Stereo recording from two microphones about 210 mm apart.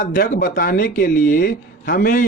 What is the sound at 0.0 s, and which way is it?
Speech, 40° left (ahead or behind).